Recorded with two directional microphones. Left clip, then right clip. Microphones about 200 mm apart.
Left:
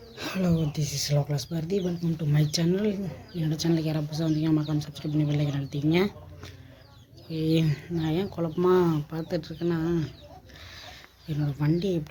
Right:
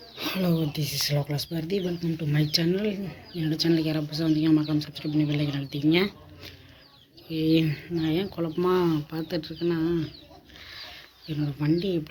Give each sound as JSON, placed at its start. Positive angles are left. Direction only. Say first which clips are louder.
{"t": 0.2, "sound": "speech", "louder": "right 2 dB", "side_deg": 5}
{"t": 11.3, "sound": "speech", "louder": "right 2 dB", "side_deg": 15}